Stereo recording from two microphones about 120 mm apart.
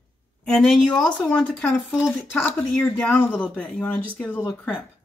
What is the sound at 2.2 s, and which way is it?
Speech, 15° left (ahead or behind).